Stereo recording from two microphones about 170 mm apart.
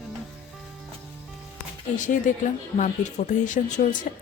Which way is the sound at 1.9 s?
50° left (ahead or behind).